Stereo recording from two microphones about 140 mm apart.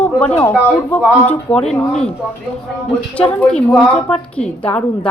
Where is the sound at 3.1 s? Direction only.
10° left (ahead or behind).